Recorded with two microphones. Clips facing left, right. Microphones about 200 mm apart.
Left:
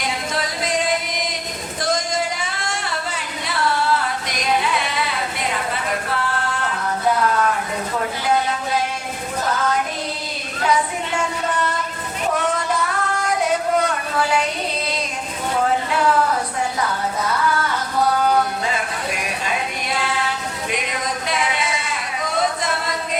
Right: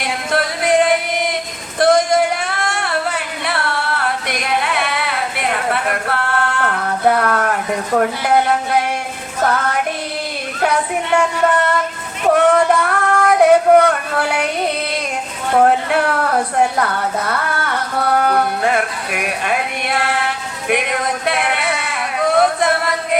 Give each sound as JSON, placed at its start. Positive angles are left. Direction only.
{"t": 0.0, "sound": "music", "side_deg": -60}
{"t": 1.8, "sound": "singing", "side_deg": -60}
{"t": 7.9, "sound": "speech", "side_deg": -60}
{"t": 9.4, "sound": "music", "side_deg": -65}
{"t": 10.6, "sound": "child singing", "side_deg": -60}
{"t": 12.3, "sound": "a sound", "side_deg": -60}